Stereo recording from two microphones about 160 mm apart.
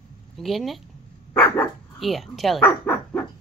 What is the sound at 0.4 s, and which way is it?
Speech, centre (ahead or behind).